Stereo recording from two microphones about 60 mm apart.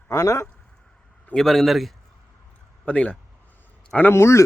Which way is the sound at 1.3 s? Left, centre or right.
Centre.